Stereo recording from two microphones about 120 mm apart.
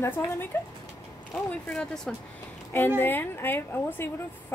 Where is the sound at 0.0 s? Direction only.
15° left (ahead or behind).